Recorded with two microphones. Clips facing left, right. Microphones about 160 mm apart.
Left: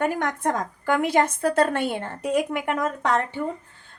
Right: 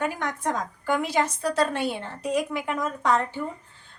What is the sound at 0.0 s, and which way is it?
A woman's voice, 55° left (ahead or behind).